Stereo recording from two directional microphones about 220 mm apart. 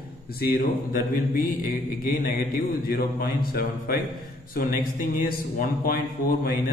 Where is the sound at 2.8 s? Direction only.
45° left (ahead or behind).